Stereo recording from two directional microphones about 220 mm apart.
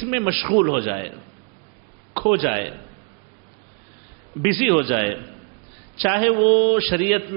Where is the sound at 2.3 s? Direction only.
10° right (ahead or behind).